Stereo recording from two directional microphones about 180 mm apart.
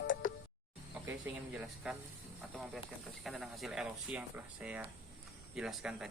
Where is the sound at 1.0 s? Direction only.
10° right (ahead or behind).